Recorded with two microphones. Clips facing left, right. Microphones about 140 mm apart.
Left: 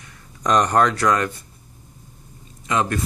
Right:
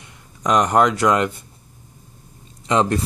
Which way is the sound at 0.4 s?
10° right (ahead or behind).